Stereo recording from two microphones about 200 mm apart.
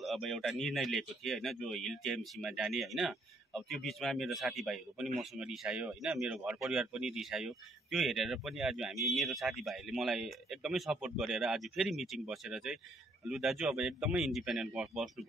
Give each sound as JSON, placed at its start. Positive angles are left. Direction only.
{"t": 0.0, "sound": "speech", "side_deg": 0}